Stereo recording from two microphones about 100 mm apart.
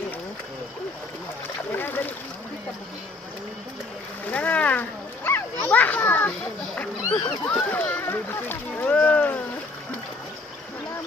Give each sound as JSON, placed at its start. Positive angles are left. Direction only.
{"t": 1.7, "sound": "splash", "side_deg": 20}
{"t": 4.3, "sound": "children playing", "side_deg": 15}
{"t": 6.7, "sound": "a sound", "side_deg": 10}